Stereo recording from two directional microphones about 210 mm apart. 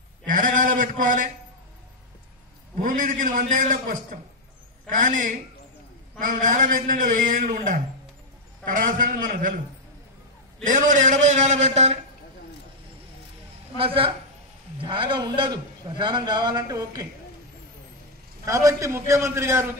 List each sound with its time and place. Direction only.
0.3 s a sound: 40° right (ahead or behind)
2.8 s a man's voice: 40° right (ahead or behind)
10.6 s a man's voice: 35° right (ahead or behind)
13.7 s a man's voice: 25° right (ahead or behind)
18.4 s a man's voice: 15° right (ahead or behind)